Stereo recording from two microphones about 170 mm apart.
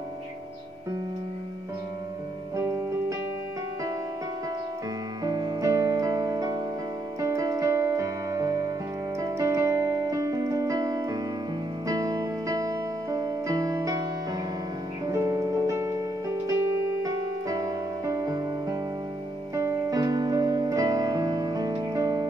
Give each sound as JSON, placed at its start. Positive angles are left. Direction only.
{"t": 2.5, "sound": "music", "side_deg": -15}
{"t": 5.2, "sound": "music", "side_deg": -20}
{"t": 9.2, "sound": "keyboard", "side_deg": -20}
{"t": 11.9, "sound": "music", "side_deg": -20}
{"t": 15.0, "sound": "music", "side_deg": -20}